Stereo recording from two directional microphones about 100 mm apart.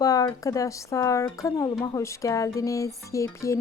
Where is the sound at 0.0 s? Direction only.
35° left (ahead or behind).